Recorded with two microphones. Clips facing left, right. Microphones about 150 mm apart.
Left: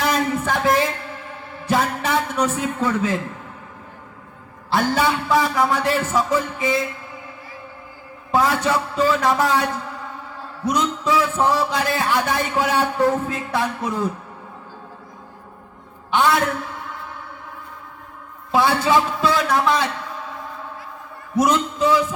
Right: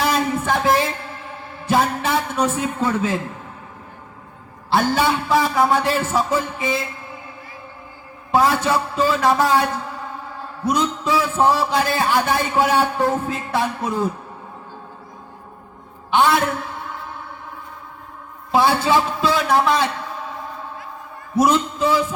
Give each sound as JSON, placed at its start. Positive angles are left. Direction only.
{"t": 0.0, "sound": "a sound", "side_deg": -30}
{"t": 1.6, "sound": "a man's voice", "side_deg": -30}
{"t": 4.7, "sound": "a man's voice", "side_deg": -30}
{"t": 8.3, "sound": "a man's voice", "side_deg": -30}
{"t": 10.7, "sound": "a man's voice", "side_deg": -30}
{"t": 18.5, "sound": "a man's voice", "side_deg": -30}
{"t": 21.3, "sound": "a man's voice", "side_deg": -30}